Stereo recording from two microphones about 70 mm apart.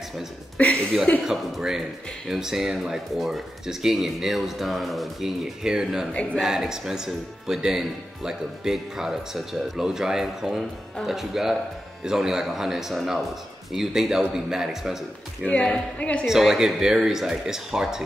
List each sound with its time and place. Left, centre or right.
0.6 s speech: centre
1.2 s speech: centre
15.4 s a woman's voice: centre
16.3 s speech: centre